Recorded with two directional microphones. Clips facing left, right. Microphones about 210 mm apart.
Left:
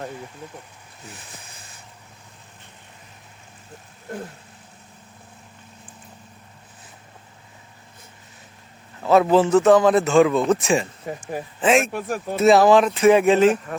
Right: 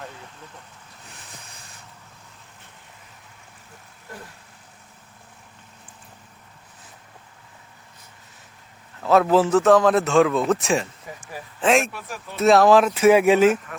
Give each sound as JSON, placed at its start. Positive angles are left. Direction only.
{"t": 9.0, "sound": "a man's voice", "side_deg": 0}
{"t": 11.1, "sound": "speech", "side_deg": 55}
{"t": 11.6, "sound": "a man's voice", "side_deg": 0}
{"t": 11.9, "sound": "speech", "side_deg": 50}
{"t": 12.4, "sound": "a man's voice", "side_deg": 0}